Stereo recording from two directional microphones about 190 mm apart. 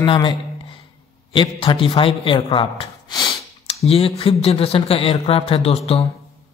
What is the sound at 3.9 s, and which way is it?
Speech, 30° left (ahead or behind).